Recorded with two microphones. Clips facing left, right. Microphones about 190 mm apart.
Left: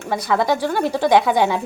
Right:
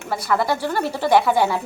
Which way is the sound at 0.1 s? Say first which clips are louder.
Left 2 dB; 20° left (ahead or behind).